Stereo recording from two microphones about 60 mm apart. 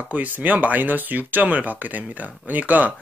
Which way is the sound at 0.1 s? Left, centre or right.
Right.